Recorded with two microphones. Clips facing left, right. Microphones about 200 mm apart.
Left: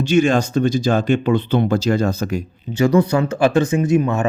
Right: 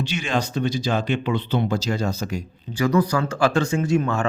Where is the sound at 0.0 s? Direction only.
45° left (ahead or behind).